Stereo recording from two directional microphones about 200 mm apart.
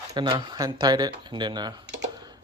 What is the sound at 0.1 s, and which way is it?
Speech, 20° right (ahead or behind).